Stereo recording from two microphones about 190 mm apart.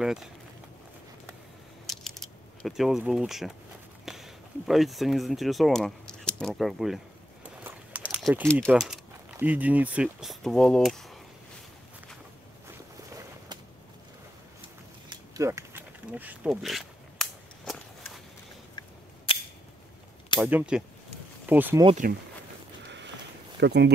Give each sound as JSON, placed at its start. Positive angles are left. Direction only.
{"t": 0.0, "sound": "speech", "side_deg": 0}
{"t": 1.9, "sound": "a sound", "side_deg": 0}
{"t": 4.0, "sound": "speech", "side_deg": 0}
{"t": 7.6, "sound": "biting", "side_deg": -5}
{"t": 8.6, "sound": "speech", "side_deg": 0}
{"t": 15.0, "sound": "a sound", "side_deg": -15}
{"t": 20.3, "sound": "speech", "side_deg": -10}
{"t": 23.6, "sound": "speech", "side_deg": -65}